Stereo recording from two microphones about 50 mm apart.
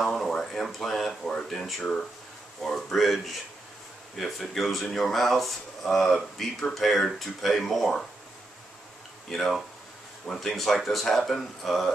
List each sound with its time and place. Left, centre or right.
0.0 s speech: centre
9.3 s speech: centre